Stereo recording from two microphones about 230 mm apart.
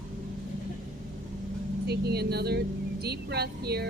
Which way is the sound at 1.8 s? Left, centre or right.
Right.